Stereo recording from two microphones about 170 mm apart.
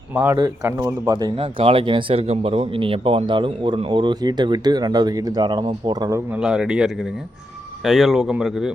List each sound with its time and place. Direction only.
0.1 s speech: 10° right (ahead or behind)
0.3 s speech: 25° right (ahead or behind)
6.4 s speech: 5° right (ahead or behind)